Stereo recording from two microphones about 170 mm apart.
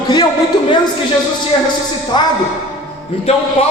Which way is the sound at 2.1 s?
25° left (ahead or behind).